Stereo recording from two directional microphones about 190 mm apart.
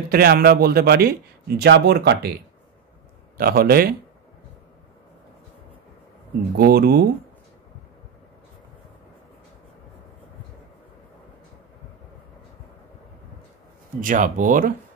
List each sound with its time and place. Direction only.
0.1 s speech: 55° right (ahead or behind)
6.5 s speech: 55° right (ahead or behind)
14.0 s speech: 45° right (ahead or behind)